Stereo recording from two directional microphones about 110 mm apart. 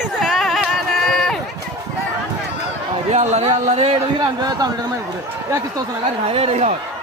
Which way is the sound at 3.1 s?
90° right.